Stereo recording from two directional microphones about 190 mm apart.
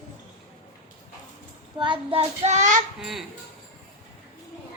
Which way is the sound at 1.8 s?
25° right (ahead or behind).